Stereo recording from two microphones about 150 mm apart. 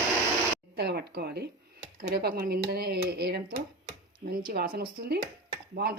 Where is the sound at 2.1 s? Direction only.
90° right.